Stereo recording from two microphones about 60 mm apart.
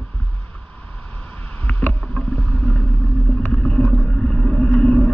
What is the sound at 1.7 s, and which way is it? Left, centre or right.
Rowboat, left.